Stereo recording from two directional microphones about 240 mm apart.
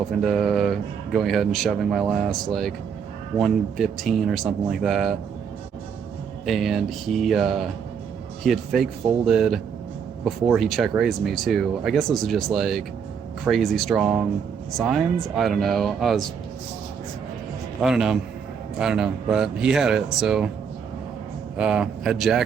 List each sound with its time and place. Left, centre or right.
0.2 s speech: centre
6.4 s speech: centre
17.7 s speech: centre
21.6 s speech: centre